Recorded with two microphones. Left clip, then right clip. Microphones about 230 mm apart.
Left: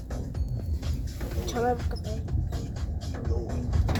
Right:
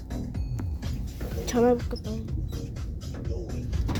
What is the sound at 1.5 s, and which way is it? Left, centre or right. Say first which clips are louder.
Speech: right 5 dB; right.